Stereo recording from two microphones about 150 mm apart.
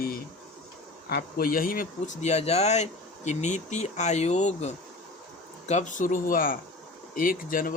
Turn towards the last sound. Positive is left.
turn(degrees=65)  # may be behind; listen again after turning